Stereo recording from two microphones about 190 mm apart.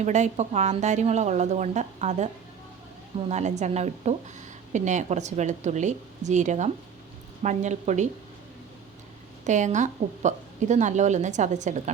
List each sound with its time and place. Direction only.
0.0 s a woman's voice: 40° right (ahead or behind)
9.5 s a woman's voice: 40° right (ahead or behind)